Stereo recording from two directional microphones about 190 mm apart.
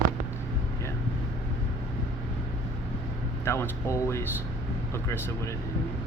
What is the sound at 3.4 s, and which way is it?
Speech, 15° left (ahead or behind).